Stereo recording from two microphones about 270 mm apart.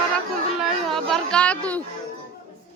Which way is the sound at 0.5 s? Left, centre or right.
Centre.